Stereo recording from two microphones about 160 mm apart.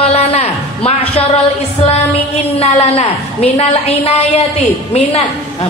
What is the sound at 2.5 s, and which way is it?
A woman's voice, 40° left (ahead or behind).